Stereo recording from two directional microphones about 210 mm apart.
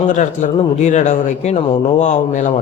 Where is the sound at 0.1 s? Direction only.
35° left (ahead or behind).